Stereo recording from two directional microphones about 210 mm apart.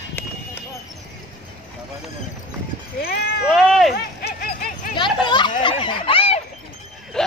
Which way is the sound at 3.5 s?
Centre (ahead or behind).